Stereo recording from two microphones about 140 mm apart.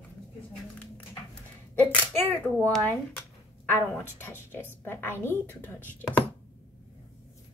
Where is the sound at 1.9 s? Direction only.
10° left (ahead or behind).